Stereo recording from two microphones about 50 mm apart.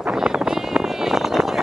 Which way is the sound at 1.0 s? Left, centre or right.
Centre.